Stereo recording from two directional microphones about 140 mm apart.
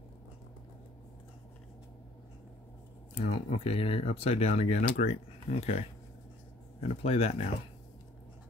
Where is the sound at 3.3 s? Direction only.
45° left (ahead or behind).